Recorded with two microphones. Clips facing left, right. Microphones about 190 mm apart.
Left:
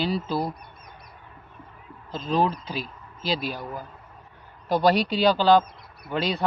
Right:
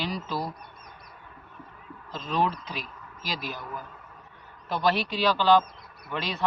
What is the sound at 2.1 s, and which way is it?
A man's voice, 30° left (ahead or behind).